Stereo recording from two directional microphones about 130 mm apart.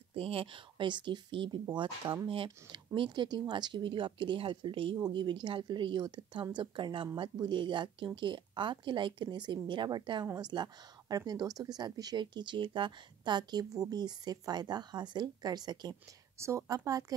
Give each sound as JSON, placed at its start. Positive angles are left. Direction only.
{"t": 0.1, "sound": "speech", "side_deg": -45}
{"t": 16.3, "sound": "a woman's voice", "side_deg": -20}